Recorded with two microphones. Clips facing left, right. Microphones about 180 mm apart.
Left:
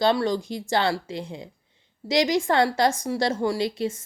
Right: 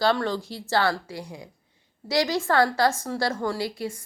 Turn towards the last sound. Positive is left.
turn(degrees=20)  # may be behind; listen again after turning